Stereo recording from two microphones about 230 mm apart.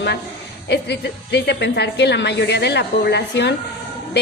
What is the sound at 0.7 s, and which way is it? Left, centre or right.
A woman's voice, left.